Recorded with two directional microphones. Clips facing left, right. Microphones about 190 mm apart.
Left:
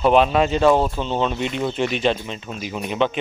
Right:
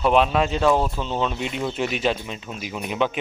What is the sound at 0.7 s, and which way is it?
Speech, 25° left (ahead or behind).